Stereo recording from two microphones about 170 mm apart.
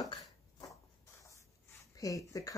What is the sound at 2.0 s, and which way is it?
Speech, 20° left (ahead or behind).